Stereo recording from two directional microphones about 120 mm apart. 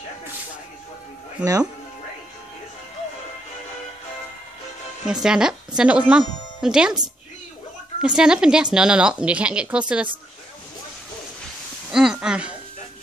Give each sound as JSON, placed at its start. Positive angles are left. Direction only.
{"t": 1.4, "sound": "speech", "side_deg": -30}
{"t": 5.0, "sound": "speech", "side_deg": -5}
{"t": 8.2, "sound": "speech", "side_deg": -5}
{"t": 11.9, "sound": "speech", "side_deg": -5}